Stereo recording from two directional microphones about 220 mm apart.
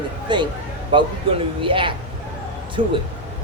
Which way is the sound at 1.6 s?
25° right (ahead or behind).